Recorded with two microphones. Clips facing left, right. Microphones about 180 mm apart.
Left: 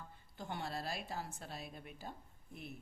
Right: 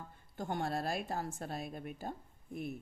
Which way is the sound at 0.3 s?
50° right (ahead or behind).